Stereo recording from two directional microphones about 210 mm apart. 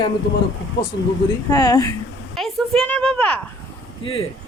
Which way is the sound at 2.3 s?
Centre (ahead or behind).